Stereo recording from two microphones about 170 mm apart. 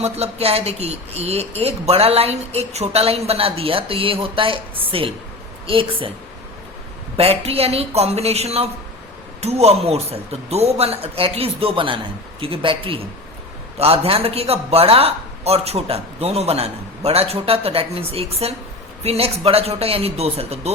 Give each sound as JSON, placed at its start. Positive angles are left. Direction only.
{"t": 0.0, "sound": "speech", "side_deg": -35}
{"t": 7.2, "sound": "speech", "side_deg": -35}